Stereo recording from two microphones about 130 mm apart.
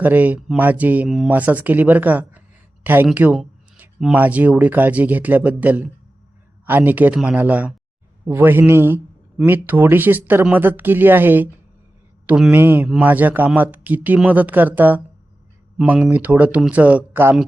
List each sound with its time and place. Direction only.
0.0 s speech: 15° right (ahead or behind)